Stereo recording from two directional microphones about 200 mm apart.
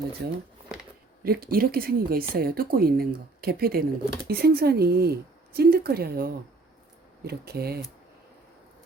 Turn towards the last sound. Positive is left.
turn(degrees=-50)  # may be behind; listen again after turning